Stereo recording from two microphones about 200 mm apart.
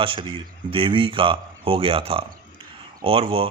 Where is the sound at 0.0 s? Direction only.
25° right (ahead or behind).